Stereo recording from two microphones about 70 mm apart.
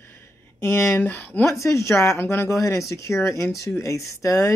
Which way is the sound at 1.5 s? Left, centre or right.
Left.